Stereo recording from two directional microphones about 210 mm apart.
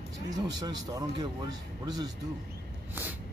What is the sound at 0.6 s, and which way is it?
Speech, 20° right (ahead or behind).